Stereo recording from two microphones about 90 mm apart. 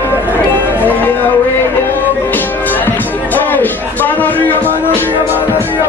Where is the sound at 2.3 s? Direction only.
20° left (ahead or behind).